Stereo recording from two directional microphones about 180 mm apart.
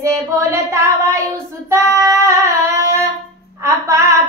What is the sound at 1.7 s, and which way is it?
Female singing, 15° right (ahead or behind).